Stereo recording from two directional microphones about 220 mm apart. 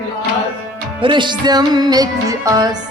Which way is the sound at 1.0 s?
20° right (ahead or behind).